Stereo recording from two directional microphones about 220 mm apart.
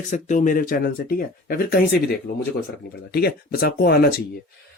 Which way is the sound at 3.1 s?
45° left (ahead or behind).